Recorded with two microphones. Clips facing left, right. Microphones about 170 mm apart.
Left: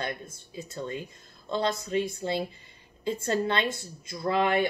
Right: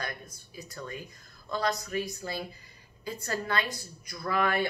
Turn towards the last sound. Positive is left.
turn(degrees=20)  # may be behind; listen again after turning